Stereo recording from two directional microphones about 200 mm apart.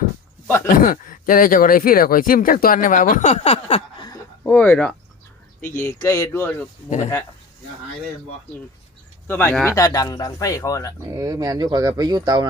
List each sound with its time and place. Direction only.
0.4 s speech: 10° left (ahead or behind)
0.8 s speech: 45° left (ahead or behind)
4.4 s speech: 5° left (ahead or behind)
9.2 s speech: 10° left (ahead or behind)
11.0 s speech: 20° right (ahead or behind)